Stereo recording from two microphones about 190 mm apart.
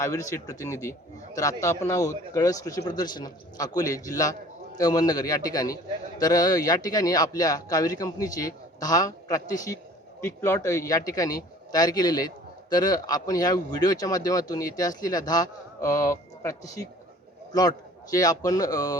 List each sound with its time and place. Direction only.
0.0 s a man's voice: 15° left (ahead or behind)